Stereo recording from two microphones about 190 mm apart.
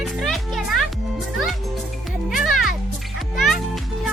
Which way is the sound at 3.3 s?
Centre (ahead or behind).